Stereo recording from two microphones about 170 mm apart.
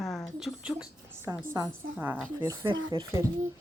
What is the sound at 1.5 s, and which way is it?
Speech, 15° right (ahead or behind).